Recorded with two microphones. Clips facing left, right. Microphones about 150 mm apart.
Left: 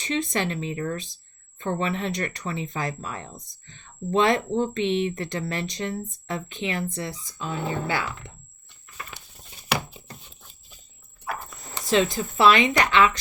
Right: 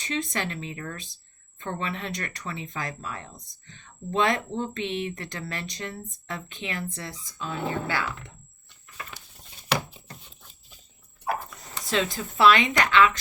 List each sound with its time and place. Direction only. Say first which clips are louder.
0.0 s speech: left 4 dB; 25° left (ahead or behind)
11.9 s speech: left 5 dB; 20° left (ahead or behind)